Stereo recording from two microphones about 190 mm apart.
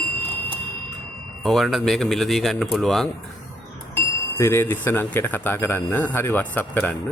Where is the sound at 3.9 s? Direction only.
15° left (ahead or behind).